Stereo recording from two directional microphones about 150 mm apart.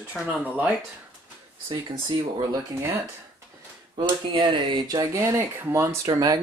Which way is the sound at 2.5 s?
20° right (ahead or behind).